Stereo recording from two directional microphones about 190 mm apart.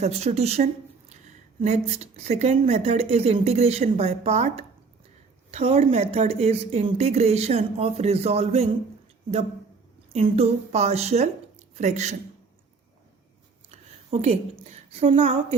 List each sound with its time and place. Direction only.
0.0 s a woman's voice: 35° right (ahead or behind)
10.1 s a woman's voice: 35° right (ahead or behind)
13.7 s a woman's voice: 35° right (ahead or behind)